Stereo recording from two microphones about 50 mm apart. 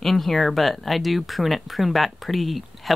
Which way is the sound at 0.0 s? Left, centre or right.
Centre.